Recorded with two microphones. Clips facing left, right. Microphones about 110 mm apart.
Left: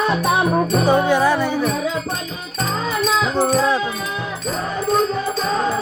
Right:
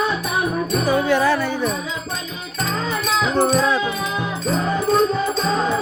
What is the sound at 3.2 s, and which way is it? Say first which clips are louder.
Music: right 2 dB; 10° left (ahead or behind).